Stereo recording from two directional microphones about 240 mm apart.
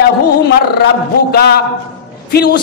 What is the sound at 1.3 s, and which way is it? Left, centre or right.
A woman's voice, left.